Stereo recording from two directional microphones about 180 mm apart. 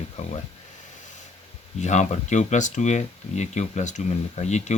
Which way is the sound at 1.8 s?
40° left (ahead or behind).